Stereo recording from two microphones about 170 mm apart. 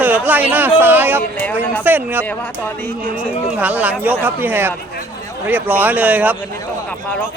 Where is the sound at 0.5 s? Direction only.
10° right (ahead or behind).